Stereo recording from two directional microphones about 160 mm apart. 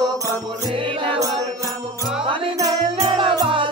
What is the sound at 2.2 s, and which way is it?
Music, 35° right (ahead or behind).